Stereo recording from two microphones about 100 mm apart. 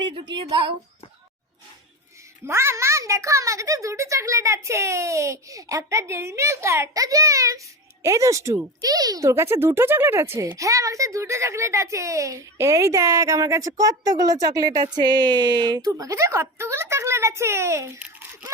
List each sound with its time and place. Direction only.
0.0 s speech: 50° right (ahead or behind)
2.5 s speech: 25° right (ahead or behind)